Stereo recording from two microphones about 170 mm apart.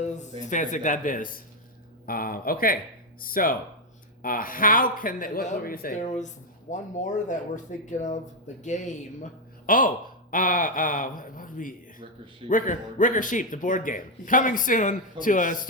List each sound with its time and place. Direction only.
0.0 s a man's voice: 45° left (ahead or behind)